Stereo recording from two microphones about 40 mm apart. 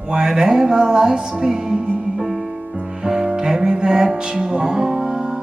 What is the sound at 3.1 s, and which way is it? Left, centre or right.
Music, centre.